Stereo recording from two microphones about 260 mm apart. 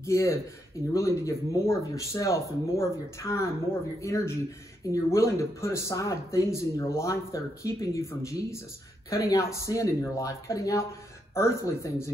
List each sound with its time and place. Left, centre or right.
0.0 s speech: centre